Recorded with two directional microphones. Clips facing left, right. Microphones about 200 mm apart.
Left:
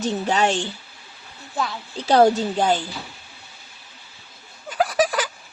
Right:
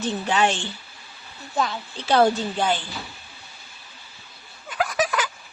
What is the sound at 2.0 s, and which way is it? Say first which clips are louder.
Speech: left 3 dB; 40° left (ahead or behind).